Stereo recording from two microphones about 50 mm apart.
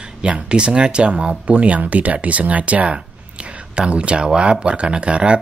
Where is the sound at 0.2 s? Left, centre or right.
Right.